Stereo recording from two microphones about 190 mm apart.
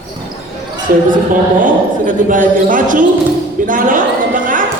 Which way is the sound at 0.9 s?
45° right (ahead or behind).